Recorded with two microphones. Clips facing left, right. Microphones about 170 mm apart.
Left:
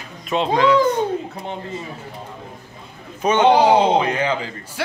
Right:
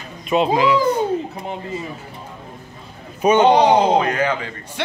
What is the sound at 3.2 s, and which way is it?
Speech, 10° right (ahead or behind).